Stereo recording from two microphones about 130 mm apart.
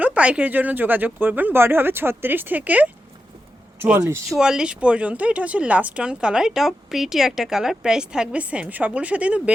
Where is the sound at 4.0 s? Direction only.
25° right (ahead or behind).